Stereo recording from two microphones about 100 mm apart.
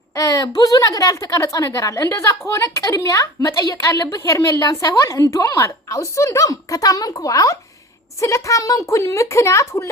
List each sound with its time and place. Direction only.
0.2 s a woman's voice: 35° left (ahead or behind)